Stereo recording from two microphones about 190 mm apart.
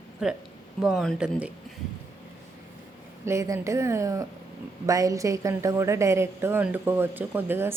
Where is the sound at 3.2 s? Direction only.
15° right (ahead or behind).